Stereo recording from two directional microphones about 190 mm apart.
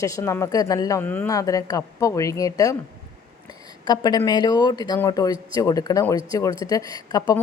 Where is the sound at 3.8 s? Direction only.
20° left (ahead or behind).